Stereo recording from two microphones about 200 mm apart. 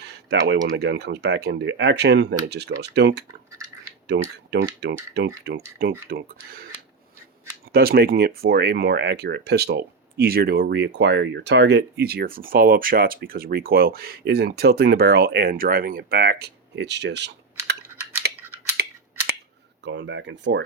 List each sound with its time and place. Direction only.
0.0 s speech: 55° right (ahead or behind)
7.7 s speech: 50° right (ahead or behind)
19.8 s speech: 65° right (ahead or behind)